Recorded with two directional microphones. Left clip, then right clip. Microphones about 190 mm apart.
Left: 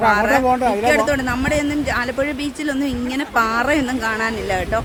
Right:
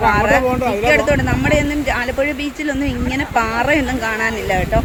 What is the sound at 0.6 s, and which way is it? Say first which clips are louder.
Speech: right 1 dB; 45° left (ahead or behind).